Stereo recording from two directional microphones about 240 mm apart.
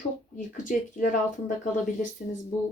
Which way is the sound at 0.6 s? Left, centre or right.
Left.